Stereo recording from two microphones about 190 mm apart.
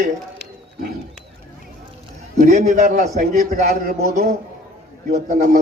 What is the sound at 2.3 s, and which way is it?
Speech, 45° right (ahead or behind).